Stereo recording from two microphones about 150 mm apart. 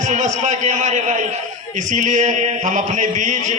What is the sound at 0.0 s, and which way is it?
A man's voice, 55° right (ahead or behind).